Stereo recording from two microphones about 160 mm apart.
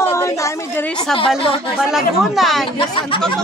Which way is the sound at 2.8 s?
30° left (ahead or behind).